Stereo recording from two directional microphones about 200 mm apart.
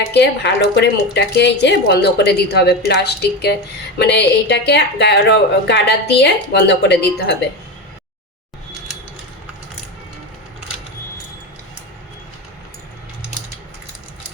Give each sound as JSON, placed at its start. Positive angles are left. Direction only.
{"t": 0.1, "sound": "speech", "side_deg": 55}